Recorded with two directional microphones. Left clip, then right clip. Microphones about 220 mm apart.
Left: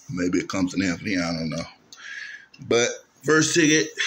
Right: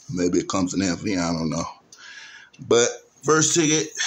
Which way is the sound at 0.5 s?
20° right (ahead or behind).